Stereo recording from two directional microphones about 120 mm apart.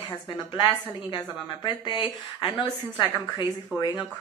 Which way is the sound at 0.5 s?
35° left (ahead or behind).